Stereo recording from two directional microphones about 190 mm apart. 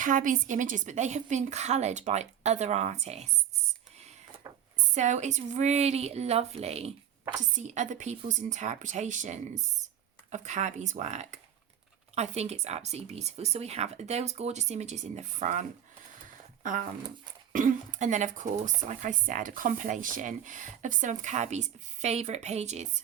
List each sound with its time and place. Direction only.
0.0 s speech: 45° right (ahead or behind)
4.9 s speech: 40° right (ahead or behind)
17.5 s speech: 45° right (ahead or behind)